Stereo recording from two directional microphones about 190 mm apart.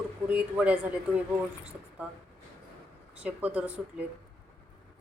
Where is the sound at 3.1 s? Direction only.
5° right (ahead or behind).